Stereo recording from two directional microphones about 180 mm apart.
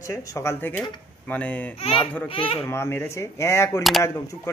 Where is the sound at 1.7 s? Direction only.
35° left (ahead or behind).